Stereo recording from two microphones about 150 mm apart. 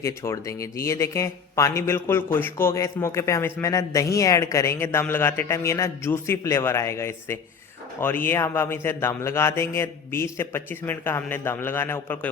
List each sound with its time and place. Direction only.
0.0 s a man's voice: 20° left (ahead or behind)